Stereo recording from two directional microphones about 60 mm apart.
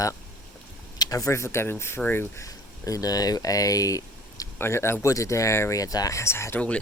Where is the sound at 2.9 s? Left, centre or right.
Left.